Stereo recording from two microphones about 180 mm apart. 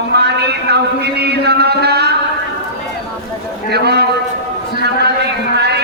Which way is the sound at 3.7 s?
65° right (ahead or behind).